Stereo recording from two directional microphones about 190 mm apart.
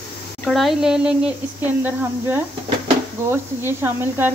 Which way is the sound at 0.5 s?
Centre (ahead or behind).